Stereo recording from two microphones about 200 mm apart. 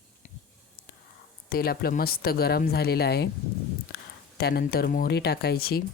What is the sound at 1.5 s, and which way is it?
Speech, 50° left (ahead or behind).